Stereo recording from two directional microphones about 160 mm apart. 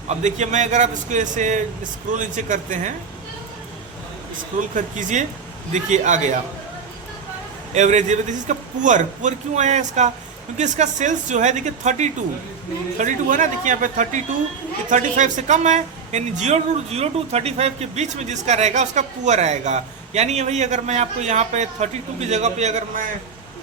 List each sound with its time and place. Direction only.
0.1 s speech: 45° right (ahead or behind)
4.7 s speech: 50° right (ahead or behind)
7.7 s speech: 45° right (ahead or behind)